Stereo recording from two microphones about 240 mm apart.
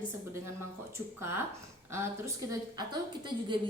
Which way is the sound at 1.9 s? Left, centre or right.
Centre.